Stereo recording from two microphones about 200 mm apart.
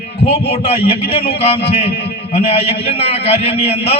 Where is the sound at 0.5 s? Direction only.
30° left (ahead or behind).